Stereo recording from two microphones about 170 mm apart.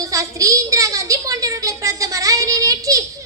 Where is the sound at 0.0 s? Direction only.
20° right (ahead or behind).